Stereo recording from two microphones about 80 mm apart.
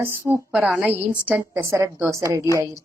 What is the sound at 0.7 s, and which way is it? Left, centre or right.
Speech, centre.